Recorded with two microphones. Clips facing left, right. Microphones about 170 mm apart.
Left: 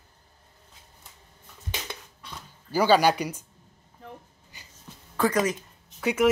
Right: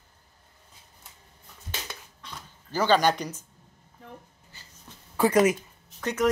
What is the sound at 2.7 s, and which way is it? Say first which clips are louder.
Speech: left 2 dB; 10° left (ahead or behind).